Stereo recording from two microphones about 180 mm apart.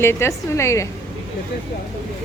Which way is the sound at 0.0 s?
15° left (ahead or behind).